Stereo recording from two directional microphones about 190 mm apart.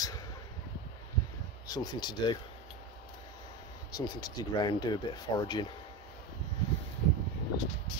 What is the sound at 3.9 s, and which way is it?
Speech, 20° left (ahead or behind).